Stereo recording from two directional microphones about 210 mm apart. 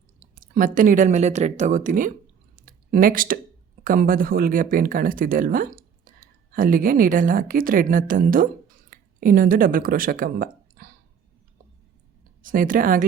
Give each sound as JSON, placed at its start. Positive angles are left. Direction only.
{"t": 0.3, "sound": "speech", "side_deg": -40}
{"t": 2.6, "sound": "a sound", "side_deg": -40}
{"t": 3.8, "sound": "speech", "side_deg": -40}
{"t": 12.4, "sound": "speech", "side_deg": -40}